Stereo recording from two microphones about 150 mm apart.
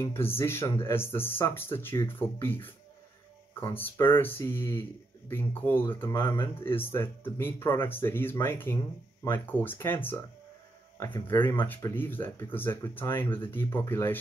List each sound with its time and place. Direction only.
0.0 s speech: 15° left (ahead or behind)